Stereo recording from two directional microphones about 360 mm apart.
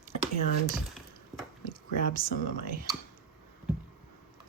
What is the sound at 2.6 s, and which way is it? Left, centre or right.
Speech, right.